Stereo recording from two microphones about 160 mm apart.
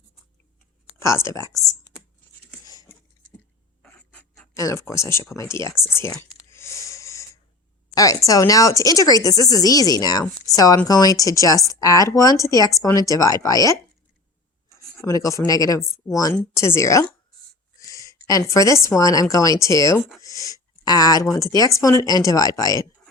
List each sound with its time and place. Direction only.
1.0 s speech: 15° left (ahead or behind)
3.8 s rodents: 10° left (ahead or behind)
4.5 s speech: 20° left (ahead or behind)
6.5 s a sound: 15° left (ahead or behind)
7.9 s speech: 20° left (ahead or behind)
14.9 s a woman's voice: 20° left (ahead or behind)